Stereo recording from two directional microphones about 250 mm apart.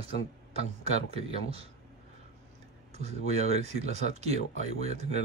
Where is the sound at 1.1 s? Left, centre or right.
Right.